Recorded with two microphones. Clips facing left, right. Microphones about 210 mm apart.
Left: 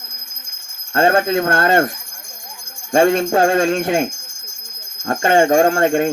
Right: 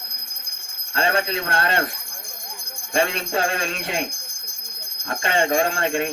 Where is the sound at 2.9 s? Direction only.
50° left (ahead or behind).